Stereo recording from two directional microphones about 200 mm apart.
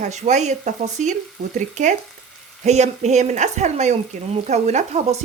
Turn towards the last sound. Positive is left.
turn(degrees=-35)  # may be behind; listen again after turning